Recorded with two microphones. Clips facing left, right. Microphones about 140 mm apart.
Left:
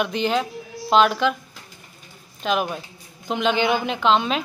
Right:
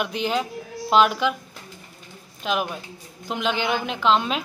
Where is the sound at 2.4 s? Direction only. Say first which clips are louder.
Left 2 dB; centre (ahead or behind).